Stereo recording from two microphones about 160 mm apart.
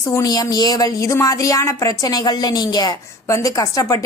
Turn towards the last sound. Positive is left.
turn(degrees=20)  # may be behind; listen again after turning